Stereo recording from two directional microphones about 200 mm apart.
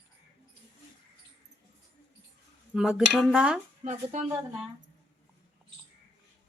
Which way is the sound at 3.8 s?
35° right (ahead or behind).